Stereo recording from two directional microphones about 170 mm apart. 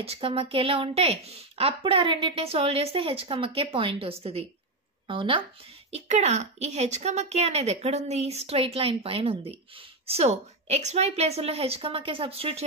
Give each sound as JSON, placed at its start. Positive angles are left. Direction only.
{"t": 0.0, "sound": "a woman's voice", "side_deg": -35}
{"t": 5.9, "sound": "a woman's voice", "side_deg": -40}